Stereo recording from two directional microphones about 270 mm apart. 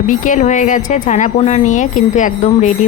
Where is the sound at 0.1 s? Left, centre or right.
Left.